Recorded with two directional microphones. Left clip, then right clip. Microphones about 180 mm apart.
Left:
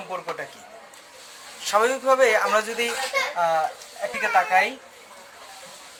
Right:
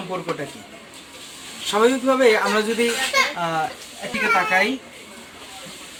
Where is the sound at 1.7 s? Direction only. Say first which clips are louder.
Right 2 dB; 30° left (ahead or behind).